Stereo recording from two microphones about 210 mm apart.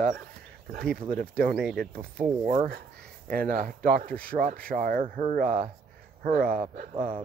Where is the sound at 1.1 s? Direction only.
45° right (ahead or behind).